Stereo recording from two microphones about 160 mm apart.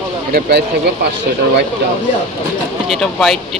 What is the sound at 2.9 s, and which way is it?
Speech, centre (ahead or behind).